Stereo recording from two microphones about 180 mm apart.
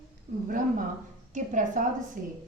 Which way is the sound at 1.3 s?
45° right (ahead or behind).